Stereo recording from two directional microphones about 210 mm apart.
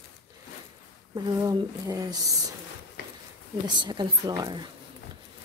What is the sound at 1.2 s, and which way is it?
Speech, 15° right (ahead or behind).